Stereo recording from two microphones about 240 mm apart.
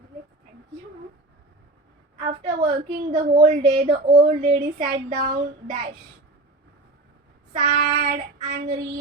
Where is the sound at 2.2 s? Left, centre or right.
Right.